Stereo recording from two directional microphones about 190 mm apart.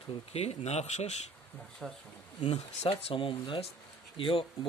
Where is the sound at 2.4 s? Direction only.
30° left (ahead or behind).